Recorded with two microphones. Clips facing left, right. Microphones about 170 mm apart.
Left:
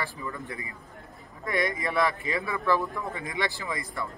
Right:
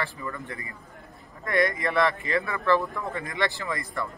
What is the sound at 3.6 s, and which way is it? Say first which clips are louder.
Speech: right 2 dB; 20° left (ahead or behind).